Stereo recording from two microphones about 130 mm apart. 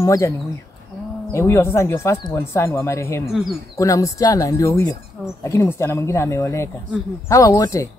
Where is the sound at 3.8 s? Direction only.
25° left (ahead or behind).